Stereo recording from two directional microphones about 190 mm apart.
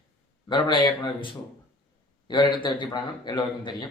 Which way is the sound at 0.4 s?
25° left (ahead or behind).